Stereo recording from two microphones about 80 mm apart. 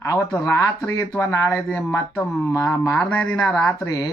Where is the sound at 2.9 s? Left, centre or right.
Centre.